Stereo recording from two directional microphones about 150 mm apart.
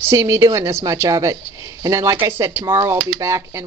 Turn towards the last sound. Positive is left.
turn(degrees=-20)  # may be behind; listen again after turning